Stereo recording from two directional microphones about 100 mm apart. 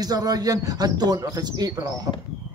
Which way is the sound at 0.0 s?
40° right (ahead or behind).